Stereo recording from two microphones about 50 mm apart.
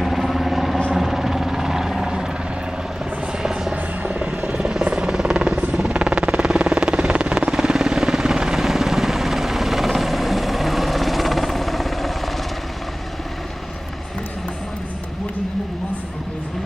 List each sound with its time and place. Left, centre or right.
0.0 s vehicle: centre
0.9 s helicopter: centre
3.7 s helicopter: right
4.6 s helicopter: centre
5.8 s vehicle: centre